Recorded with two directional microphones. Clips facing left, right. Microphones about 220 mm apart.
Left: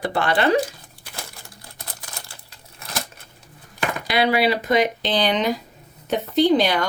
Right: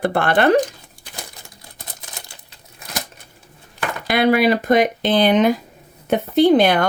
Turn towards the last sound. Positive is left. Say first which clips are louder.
# right 4 dB
turn(degrees=-55)  # may be behind; listen again after turning